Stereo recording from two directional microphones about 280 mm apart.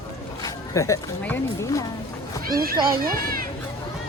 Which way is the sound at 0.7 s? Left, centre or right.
Centre.